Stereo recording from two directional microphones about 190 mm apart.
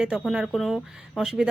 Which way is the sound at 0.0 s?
5° right (ahead or behind).